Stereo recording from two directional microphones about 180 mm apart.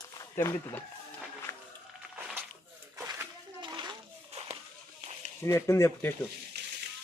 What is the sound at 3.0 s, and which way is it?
Bathtub, 20° right (ahead or behind).